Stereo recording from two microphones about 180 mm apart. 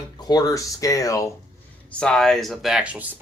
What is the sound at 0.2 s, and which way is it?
Speech, 20° left (ahead or behind).